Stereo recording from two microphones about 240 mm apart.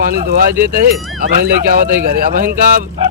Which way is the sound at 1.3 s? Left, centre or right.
Right.